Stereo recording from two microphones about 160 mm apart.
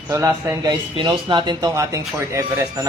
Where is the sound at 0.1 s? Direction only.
20° right (ahead or behind).